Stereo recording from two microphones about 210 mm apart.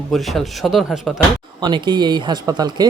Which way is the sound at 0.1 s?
Centre (ahead or behind).